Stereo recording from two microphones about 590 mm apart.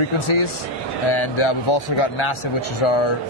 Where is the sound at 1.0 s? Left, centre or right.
Left.